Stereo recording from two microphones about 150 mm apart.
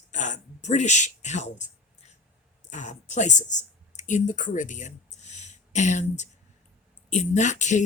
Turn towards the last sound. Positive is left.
turn(degrees=55)  # may be behind; listen again after turning